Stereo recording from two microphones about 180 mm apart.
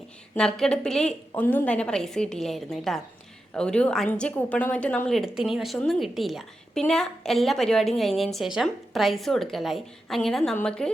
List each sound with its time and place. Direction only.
0.3 s a woman's voice: 5° left (ahead or behind)